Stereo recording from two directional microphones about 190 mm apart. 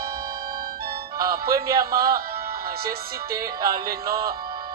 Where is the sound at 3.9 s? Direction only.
15° right (ahead or behind).